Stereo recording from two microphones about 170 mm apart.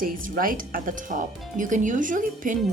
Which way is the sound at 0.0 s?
55° right (ahead or behind).